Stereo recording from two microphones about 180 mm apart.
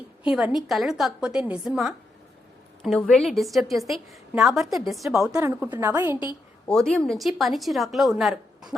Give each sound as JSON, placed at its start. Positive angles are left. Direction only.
{"t": 0.3, "sound": "a woman's voice", "side_deg": -5}
{"t": 5.4, "sound": "a woman's voice", "side_deg": -15}
{"t": 6.7, "sound": "a woman's voice", "side_deg": 5}